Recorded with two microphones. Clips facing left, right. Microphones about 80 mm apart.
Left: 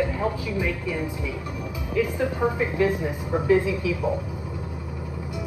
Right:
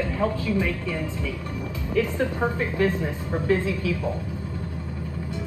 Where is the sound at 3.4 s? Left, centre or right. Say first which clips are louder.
Left 3 dB; centre.